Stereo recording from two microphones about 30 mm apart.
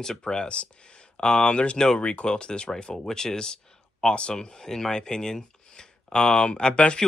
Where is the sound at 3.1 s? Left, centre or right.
Left.